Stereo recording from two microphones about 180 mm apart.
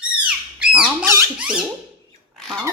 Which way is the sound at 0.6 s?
5° right (ahead or behind).